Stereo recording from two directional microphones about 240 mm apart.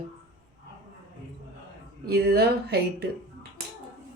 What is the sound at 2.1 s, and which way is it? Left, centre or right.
Speech, right.